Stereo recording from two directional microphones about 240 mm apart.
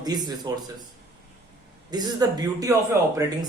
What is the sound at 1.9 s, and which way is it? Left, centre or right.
Speech, centre.